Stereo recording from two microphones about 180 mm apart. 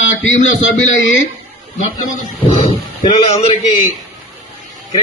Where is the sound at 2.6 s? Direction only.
35° left (ahead or behind).